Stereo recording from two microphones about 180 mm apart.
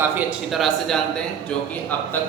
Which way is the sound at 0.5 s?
Centre (ahead or behind).